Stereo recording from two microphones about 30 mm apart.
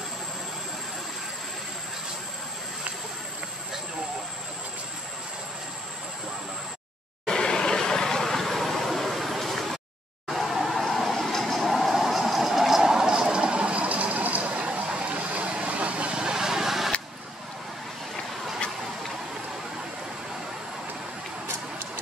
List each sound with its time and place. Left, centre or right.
7.2 s vehicle: left; by 11.1 s centre
11.1 s vehicle: centre
13.2 s a sound: right
15.0 s vehicle: right; by 16.9 s centre